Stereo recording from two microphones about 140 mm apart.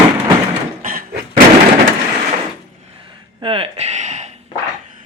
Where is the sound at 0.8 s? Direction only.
80° right.